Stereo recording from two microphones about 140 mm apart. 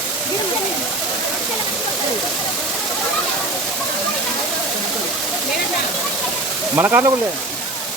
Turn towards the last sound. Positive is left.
turn(degrees=-15)  # may be behind; listen again after turning